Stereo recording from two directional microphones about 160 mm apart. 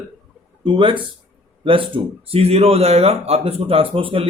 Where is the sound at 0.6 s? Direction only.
30° right (ahead or behind).